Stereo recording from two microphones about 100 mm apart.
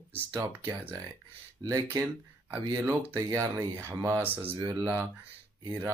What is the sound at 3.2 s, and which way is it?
Speech, 30° right (ahead or behind).